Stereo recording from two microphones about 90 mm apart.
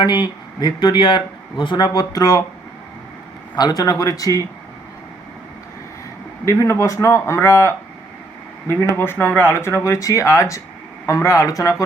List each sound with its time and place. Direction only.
0.0 s speech: 55° left (ahead or behind)
1.9 s speech: 45° left (ahead or behind)
3.6 s speech: 45° left (ahead or behind)
6.4 s a man's voice: 35° left (ahead or behind)
8.7 s speech: 35° left (ahead or behind)